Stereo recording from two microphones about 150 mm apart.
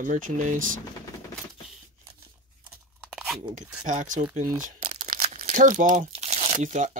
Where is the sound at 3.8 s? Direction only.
55° right (ahead or behind).